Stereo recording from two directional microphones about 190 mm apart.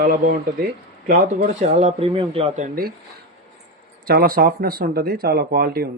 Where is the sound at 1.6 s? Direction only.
35° right (ahead or behind).